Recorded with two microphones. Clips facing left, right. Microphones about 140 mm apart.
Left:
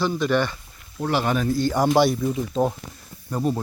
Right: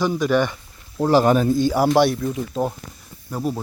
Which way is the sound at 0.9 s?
40° right (ahead or behind).